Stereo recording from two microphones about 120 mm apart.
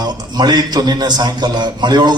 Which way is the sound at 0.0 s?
35° right (ahead or behind).